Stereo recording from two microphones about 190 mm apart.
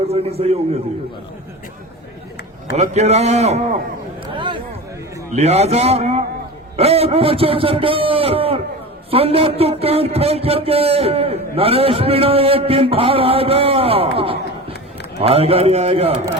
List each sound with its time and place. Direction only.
0.1 s a man's voice: 30° right (ahead or behind)
2.7 s a man's voice: 35° right (ahead or behind)
4.3 s a sound: 25° right (ahead or behind)
5.3 s a man's voice: 35° right (ahead or behind)